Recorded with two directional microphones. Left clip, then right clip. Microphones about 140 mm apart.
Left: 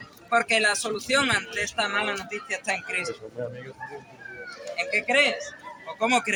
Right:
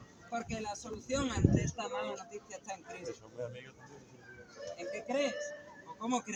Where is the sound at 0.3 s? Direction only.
25° left (ahead or behind).